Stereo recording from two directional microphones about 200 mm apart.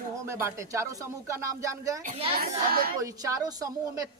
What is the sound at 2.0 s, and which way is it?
Speech, 35° right (ahead or behind).